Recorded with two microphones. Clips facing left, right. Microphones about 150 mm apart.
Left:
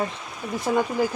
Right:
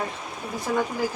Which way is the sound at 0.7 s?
30° left (ahead or behind).